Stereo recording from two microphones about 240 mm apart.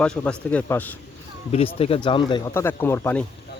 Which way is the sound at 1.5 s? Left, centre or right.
Left.